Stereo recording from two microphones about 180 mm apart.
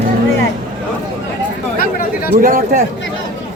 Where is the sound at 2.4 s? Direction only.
55° right (ahead or behind).